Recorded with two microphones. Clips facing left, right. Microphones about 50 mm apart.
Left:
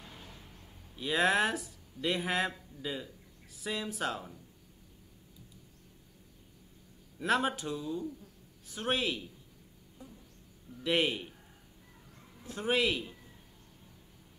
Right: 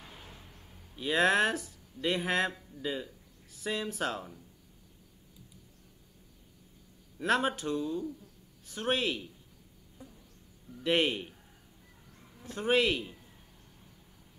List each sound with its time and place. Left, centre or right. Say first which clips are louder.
0.0 s a sound: even; centre
0.9 s speech: right 2 dB; centre
7.2 s speech: right 1 dB; centre
10.8 s speech: right 2 dB; centre
12.5 s speech: right 3 dB; centre